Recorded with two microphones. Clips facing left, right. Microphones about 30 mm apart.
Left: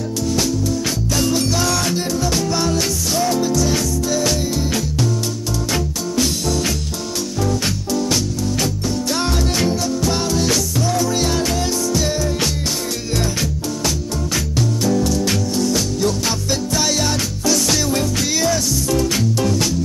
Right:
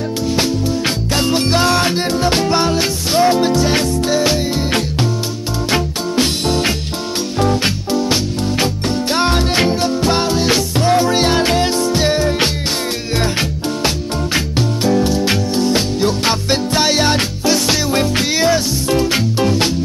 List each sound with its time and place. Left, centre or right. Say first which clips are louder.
1.1 s music: right 3 dB; right
5.7 s music: right 7 dB; right
13.8 s music: right 3 dB; right